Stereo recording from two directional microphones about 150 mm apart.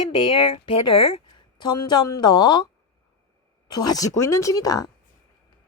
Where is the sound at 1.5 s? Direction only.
30° left (ahead or behind).